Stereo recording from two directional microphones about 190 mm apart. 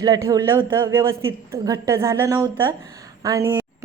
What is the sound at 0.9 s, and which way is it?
A woman's voice, 15° right (ahead or behind).